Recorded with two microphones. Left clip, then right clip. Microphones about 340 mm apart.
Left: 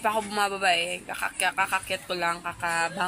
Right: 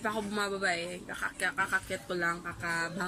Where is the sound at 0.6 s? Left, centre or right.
Left.